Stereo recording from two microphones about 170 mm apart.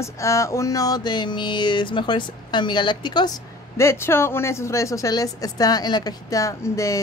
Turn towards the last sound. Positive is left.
turn(degrees=20)  # may be behind; listen again after turning